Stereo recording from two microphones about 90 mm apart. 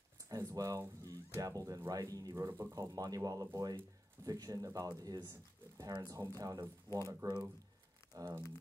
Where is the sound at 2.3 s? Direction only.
30° right (ahead or behind).